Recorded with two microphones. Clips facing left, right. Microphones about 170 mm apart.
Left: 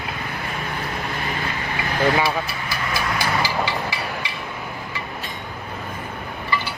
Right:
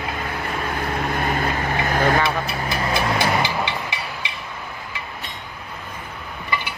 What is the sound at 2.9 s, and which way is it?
Vehicle, 20° right (ahead or behind).